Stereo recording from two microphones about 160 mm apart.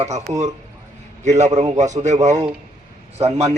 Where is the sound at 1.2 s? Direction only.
45° right (ahead or behind).